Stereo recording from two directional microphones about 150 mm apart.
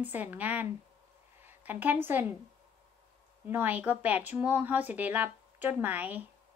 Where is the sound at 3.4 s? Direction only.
10° right (ahead or behind).